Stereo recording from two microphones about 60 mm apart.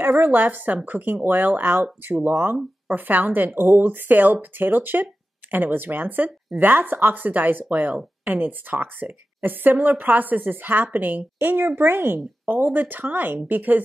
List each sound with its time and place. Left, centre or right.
0.0 s a woman's voice: right